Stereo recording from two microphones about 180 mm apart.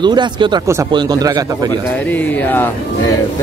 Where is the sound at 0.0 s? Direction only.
25° right (ahead or behind).